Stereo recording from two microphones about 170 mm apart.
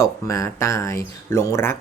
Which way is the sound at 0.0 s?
15° left (ahead or behind).